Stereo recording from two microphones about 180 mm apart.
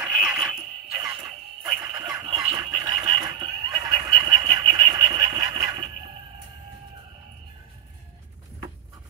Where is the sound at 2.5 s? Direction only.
25° right (ahead or behind).